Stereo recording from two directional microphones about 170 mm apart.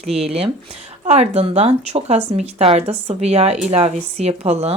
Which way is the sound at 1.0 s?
40° right (ahead or behind).